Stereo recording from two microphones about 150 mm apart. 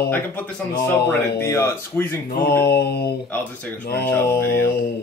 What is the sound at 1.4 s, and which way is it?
Speech, 20° left (ahead or behind).